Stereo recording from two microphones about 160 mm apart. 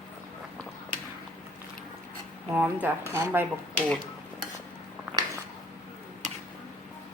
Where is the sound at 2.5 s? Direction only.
10° right (ahead or behind).